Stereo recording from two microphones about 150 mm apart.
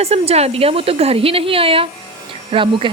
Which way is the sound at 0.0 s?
45° right (ahead or behind).